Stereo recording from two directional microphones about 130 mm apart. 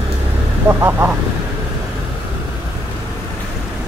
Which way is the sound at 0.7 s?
20° right (ahead or behind).